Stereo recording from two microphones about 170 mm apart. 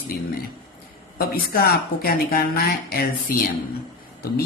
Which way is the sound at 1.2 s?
65° left (ahead or behind).